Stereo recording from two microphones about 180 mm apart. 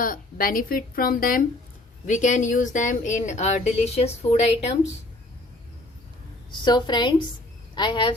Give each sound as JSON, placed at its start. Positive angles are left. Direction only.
{"t": 0.0, "sound": "a woman's voice", "side_deg": 50}
{"t": 6.7, "sound": "a woman's voice", "side_deg": 25}